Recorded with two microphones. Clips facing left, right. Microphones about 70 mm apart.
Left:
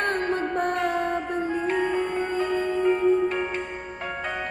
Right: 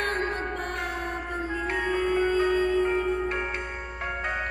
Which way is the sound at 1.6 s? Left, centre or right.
Right.